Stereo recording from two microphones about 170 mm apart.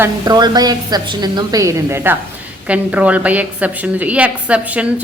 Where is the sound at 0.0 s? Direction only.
25° right (ahead or behind).